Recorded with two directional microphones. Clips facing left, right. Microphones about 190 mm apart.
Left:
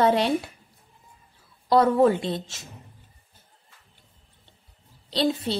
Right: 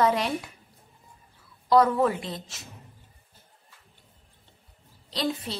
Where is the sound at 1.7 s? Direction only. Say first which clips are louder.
Left 3 dB; 30° left (ahead or behind).